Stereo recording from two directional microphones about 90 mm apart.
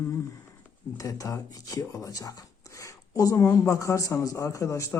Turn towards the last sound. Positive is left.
turn(degrees=35)  # may be behind; listen again after turning